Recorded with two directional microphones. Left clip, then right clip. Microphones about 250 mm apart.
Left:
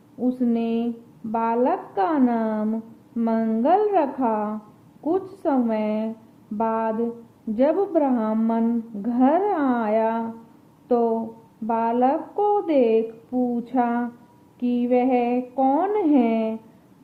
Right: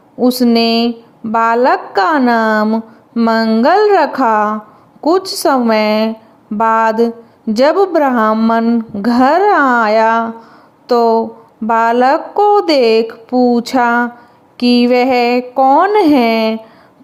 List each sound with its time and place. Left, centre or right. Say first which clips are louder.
0.3 s a woman's voice: right 13 dB; right